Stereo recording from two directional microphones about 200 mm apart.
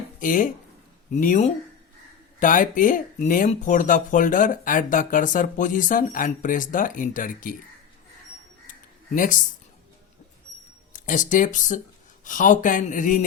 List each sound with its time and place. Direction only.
0.2 s speech: 40° left (ahead or behind)
9.1 s speech: 40° left (ahead or behind)
10.9 s speech: 40° left (ahead or behind)